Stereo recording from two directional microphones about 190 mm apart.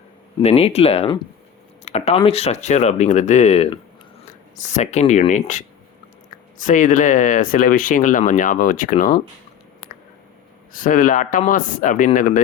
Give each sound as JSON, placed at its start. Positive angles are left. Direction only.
{"t": 0.4, "sound": "speech", "side_deg": 30}
{"t": 10.7, "sound": "speech", "side_deg": 45}